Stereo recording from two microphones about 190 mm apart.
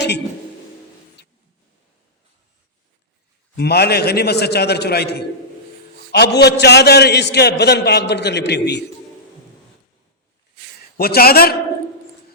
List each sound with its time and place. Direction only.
3.5 s a man's voice: 60° left (ahead or behind)
10.9 s a man's voice: 55° left (ahead or behind)